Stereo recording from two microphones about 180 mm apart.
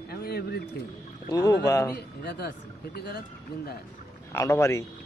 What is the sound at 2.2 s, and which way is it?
Speech, 65° left (ahead or behind).